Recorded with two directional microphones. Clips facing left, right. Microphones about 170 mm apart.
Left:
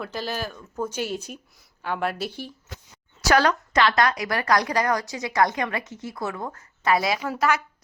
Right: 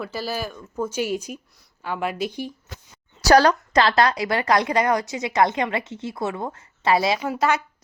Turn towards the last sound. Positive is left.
turn(degrees=-25)  # may be behind; listen again after turning